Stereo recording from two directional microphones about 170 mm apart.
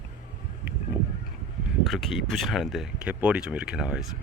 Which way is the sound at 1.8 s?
Centre (ahead or behind).